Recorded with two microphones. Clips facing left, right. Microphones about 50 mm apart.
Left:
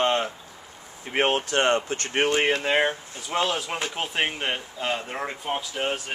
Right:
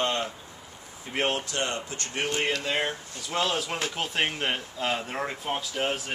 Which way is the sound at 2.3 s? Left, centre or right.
Left.